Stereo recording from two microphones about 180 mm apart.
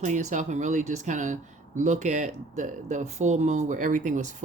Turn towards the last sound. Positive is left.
turn(degrees=-45)  # may be behind; listen again after turning